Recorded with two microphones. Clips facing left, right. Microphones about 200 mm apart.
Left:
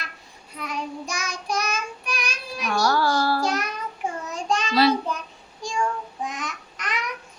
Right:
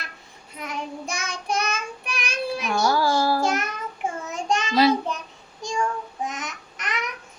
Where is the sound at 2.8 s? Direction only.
10° right (ahead or behind).